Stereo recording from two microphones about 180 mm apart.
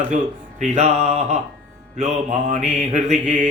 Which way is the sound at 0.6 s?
40° right (ahead or behind).